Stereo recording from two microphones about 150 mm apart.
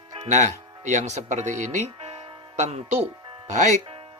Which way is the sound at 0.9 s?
50° right (ahead or behind).